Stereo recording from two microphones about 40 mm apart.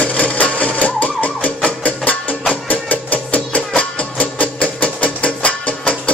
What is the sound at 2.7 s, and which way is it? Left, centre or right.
Music, left.